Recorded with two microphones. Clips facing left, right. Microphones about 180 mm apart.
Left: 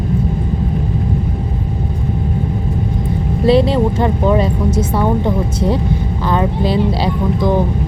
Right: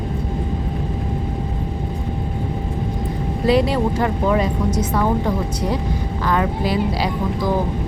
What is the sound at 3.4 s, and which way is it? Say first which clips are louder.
Speech: left 5 dB; 25° left (ahead or behind).